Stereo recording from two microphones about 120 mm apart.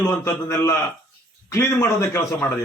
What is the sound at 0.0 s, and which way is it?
A man's voice, 20° left (ahead or behind).